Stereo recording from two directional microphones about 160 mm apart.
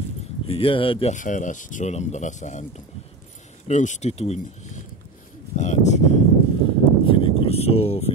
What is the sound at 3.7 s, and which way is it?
Speech, 50° left (ahead or behind).